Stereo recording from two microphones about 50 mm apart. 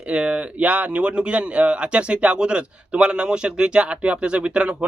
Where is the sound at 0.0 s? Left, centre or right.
Right.